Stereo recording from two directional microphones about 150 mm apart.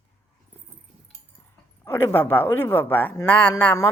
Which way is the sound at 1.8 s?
15° left (ahead or behind).